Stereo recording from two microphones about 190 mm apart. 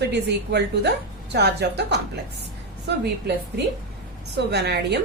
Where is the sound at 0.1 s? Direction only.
60° right (ahead or behind).